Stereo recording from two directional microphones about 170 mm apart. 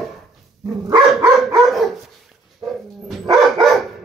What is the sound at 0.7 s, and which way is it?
Dog, 25° right (ahead or behind).